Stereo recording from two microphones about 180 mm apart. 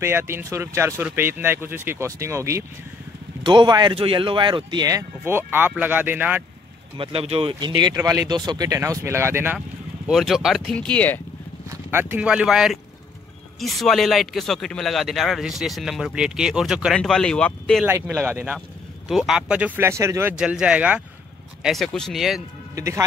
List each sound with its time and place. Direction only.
0.0 s speech: 15° right (ahead or behind)
7.0 s speech: 30° right (ahead or behind); by 9.6 s 15° right (ahead or behind)
10.0 s speech: centre (ahead or behind)
11.7 s speech: 10° right (ahead or behind); by 17.8 s 5° left (ahead or behind)
17.8 s speech: 10° right (ahead or behind)
22.8 s speech: 15° right (ahead or behind)